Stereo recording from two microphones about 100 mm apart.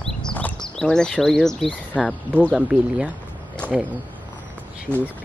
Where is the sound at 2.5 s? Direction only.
10° right (ahead or behind).